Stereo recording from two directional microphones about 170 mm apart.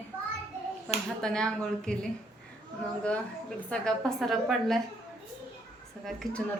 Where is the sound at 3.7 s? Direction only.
5° left (ahead or behind).